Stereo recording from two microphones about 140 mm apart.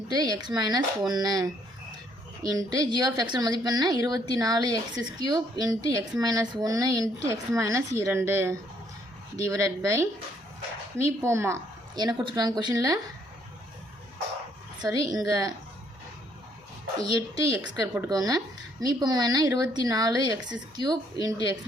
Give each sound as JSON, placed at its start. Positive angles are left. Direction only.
{"t": 0.1, "sound": "a woman's voice", "side_deg": -30}
{"t": 14.8, "sound": "a woman's voice", "side_deg": -25}
{"t": 17.0, "sound": "a woman's voice", "side_deg": -25}